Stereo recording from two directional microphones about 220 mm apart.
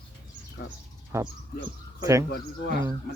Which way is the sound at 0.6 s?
50° left (ahead or behind).